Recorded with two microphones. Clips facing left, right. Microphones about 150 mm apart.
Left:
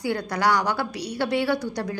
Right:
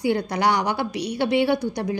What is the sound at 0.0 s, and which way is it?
A woman's voice, 20° right (ahead or behind).